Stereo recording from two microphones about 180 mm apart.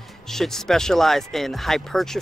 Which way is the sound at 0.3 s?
Centre (ahead or behind).